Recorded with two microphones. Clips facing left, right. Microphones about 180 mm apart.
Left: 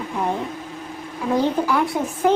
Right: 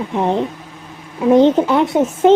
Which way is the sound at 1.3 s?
20° right (ahead or behind).